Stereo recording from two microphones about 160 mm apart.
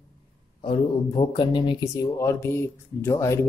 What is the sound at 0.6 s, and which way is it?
Speech, 30° left (ahead or behind).